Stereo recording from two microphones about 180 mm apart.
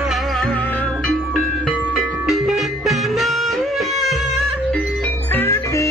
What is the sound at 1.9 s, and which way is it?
Music, centre (ahead or behind).